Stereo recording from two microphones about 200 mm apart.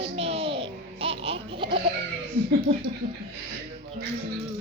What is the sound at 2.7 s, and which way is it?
Speech, 50° right (ahead or behind).